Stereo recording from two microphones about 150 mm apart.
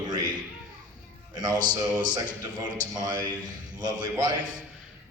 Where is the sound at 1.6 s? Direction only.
30° right (ahead or behind).